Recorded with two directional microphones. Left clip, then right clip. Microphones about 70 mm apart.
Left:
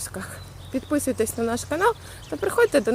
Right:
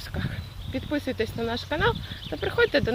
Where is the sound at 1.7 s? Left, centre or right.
Left.